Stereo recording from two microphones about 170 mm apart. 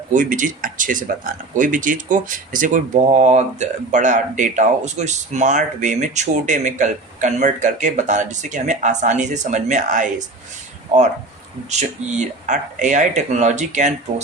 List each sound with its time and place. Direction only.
0.1 s speech: 50° right (ahead or behind)
12.0 s speech: 45° right (ahead or behind)